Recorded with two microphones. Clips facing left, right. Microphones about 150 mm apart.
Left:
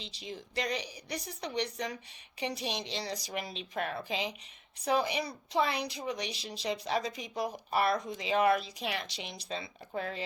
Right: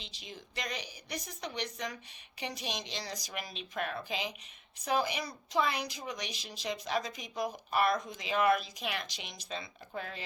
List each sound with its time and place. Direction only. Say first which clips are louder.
0.0 s a woman's voice: left 5 dB; 30° left (ahead or behind)
2.4 s a woman's voice: left 4 dB; 30° left (ahead or behind)